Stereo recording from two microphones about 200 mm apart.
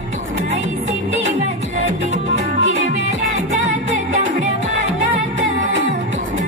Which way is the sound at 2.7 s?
35° right (ahead or behind).